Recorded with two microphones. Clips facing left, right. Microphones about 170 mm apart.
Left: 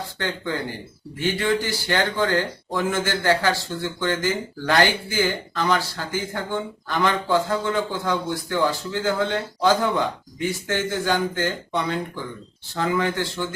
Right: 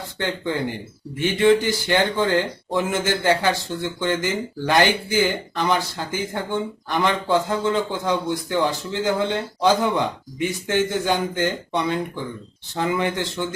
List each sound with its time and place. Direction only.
1.2 s speech: 20° right (ahead or behind)